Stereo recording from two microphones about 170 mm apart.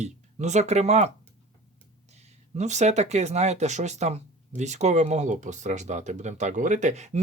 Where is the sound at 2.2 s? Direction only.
45° right (ahead or behind).